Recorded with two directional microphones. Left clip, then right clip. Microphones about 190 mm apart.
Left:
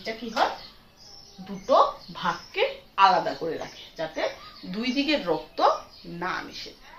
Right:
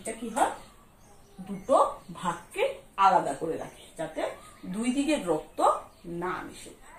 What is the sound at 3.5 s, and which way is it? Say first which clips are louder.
Speech: left 2 dB; 15° left (ahead or behind).